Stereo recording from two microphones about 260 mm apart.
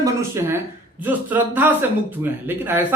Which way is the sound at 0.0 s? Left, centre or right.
Centre.